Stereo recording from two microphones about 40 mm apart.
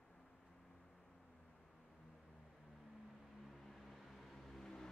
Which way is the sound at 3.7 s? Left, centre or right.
Centre.